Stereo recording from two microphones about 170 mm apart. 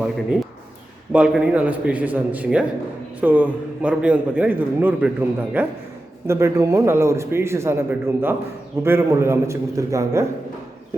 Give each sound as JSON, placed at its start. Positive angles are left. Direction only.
{"t": 1.1, "sound": "a man's voice", "side_deg": -5}